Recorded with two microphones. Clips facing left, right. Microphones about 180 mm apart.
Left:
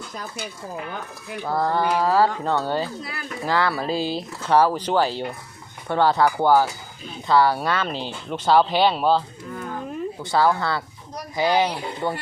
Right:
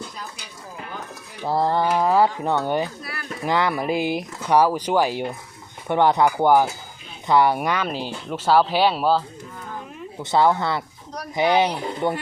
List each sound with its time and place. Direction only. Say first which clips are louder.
1.5 s speech: right 2 dB; 25° right (ahead or behind)
3.0 s speech: left 1 dB; 20° left (ahead or behind)
3.4 s speech: right 1 dB; 20° right (ahead or behind)
10.2 s speech: right 2 dB; 20° right (ahead or behind)